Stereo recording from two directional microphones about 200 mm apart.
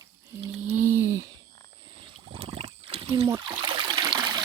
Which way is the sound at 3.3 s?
25° right (ahead or behind).